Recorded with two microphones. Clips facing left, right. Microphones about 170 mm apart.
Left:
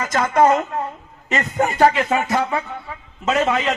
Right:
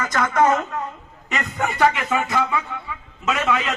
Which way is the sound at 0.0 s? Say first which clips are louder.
Left 3 dB; 30° left (ahead or behind).